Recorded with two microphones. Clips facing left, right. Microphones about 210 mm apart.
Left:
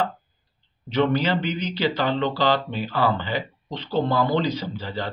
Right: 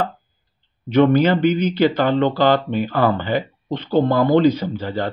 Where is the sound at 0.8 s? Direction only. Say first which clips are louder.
Right 7 dB; 50° right (ahead or behind).